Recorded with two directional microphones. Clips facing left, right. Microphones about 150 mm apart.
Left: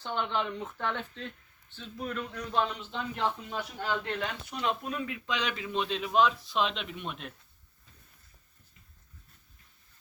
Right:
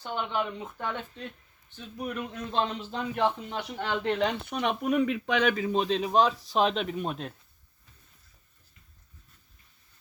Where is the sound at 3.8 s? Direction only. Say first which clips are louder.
Right 6 dB; 70° right (ahead or behind); by 7.3 s 35° right (ahead or behind).